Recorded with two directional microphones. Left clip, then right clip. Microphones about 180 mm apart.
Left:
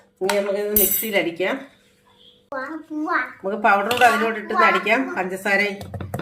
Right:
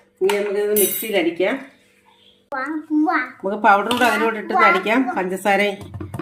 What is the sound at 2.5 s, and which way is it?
A child's voice, 35° right (ahead or behind).